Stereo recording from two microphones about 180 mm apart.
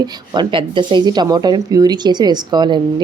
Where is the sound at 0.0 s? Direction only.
25° right (ahead or behind).